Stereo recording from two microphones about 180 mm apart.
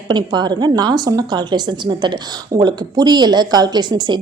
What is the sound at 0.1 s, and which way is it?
A woman's voice, 25° right (ahead or behind).